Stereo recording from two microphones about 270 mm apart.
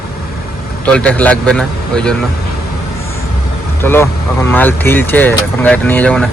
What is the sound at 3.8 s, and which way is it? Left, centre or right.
Speech, centre.